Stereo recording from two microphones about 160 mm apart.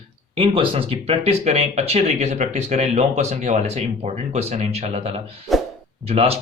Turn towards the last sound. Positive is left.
turn(degrees=-40)  # may be behind; listen again after turning